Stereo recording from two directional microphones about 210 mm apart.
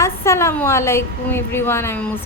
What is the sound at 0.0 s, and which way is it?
A woman's voice, 15° left (ahead or behind).